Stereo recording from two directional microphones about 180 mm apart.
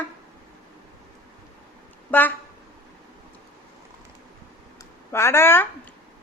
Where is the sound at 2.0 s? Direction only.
10° left (ahead or behind).